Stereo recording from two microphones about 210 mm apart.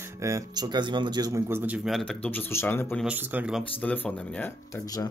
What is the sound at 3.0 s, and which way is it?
Speech, 5° right (ahead or behind).